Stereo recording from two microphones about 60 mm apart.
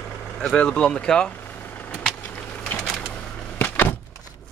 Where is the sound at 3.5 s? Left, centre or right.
Left.